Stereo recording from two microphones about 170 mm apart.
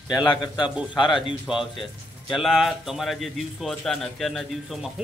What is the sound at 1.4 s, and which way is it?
Speech, centre (ahead or behind).